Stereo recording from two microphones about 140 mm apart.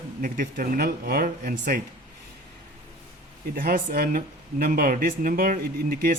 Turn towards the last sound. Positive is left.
turn(degrees=-90)